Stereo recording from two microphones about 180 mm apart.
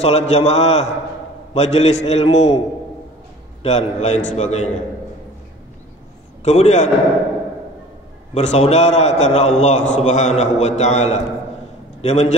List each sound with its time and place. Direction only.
0.0 s a man's voice: 35° left (ahead or behind)
3.6 s a man's voice: 40° left (ahead or behind)
6.4 s a man's voice: 40° left (ahead or behind)
8.4 s a man's voice: 40° left (ahead or behind)